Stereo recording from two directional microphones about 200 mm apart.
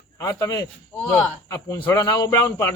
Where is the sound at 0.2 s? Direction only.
15° left (ahead or behind).